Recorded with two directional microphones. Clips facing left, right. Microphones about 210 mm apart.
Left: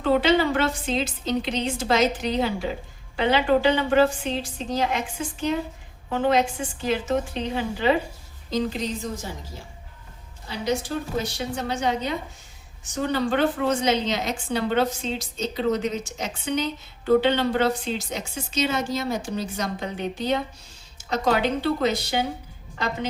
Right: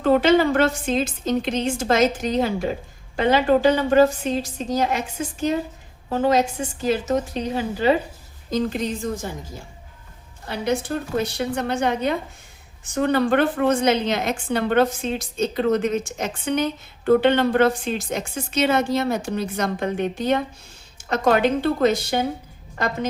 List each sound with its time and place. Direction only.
0.0 s a woman's voice: 45° right (ahead or behind)
8.4 s a woman's voice: 50° right (ahead or behind)
10.4 s a woman's voice: 55° right (ahead or behind)